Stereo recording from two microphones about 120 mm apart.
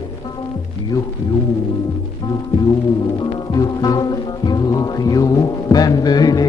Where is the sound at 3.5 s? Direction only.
30° left (ahead or behind).